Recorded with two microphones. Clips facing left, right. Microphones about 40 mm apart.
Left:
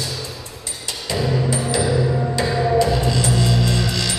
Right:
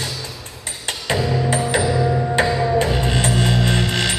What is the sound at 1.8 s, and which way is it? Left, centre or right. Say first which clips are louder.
Music: right 1 dB; right.